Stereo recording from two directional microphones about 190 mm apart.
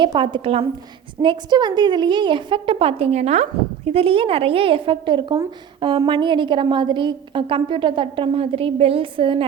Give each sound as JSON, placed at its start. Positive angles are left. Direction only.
{"t": 0.0, "sound": "a woman's voice", "side_deg": -25}